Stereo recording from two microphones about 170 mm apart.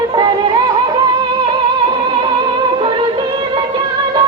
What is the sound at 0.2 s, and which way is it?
Music, 25° right (ahead or behind).